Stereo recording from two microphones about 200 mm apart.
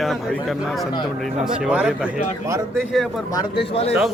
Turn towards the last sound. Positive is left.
turn(degrees=30)  # may be behind; listen again after turning